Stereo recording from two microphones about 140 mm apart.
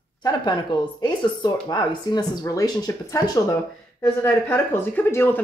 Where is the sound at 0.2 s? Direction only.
30° left (ahead or behind).